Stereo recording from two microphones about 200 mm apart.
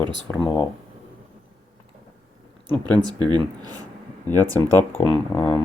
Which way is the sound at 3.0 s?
20° right (ahead or behind).